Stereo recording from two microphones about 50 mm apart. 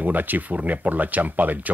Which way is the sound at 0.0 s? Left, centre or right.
Right.